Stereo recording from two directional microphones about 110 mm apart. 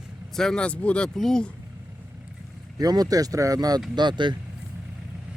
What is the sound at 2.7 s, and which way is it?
Speech, 35° right (ahead or behind).